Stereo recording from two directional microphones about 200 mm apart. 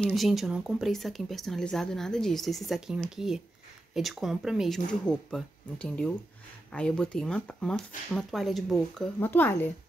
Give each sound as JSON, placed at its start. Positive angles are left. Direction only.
{"t": 0.0, "sound": "speech", "side_deg": 0}